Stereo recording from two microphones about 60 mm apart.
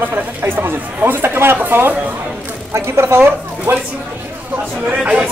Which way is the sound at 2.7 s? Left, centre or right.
Right.